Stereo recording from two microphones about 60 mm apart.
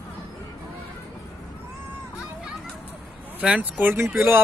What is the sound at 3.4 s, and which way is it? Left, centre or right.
Speech, right.